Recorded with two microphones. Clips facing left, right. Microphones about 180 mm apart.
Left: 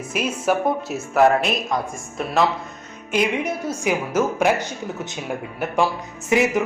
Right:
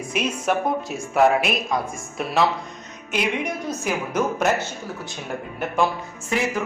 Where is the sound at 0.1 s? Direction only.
5° left (ahead or behind).